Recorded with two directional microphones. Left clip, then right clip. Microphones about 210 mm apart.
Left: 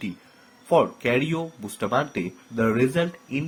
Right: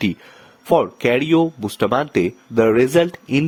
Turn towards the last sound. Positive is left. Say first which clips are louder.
# right 10 dB
turn(degrees=-50)  # may be behind; listen again after turning